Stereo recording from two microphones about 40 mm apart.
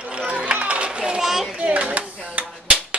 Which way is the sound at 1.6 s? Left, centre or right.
Right.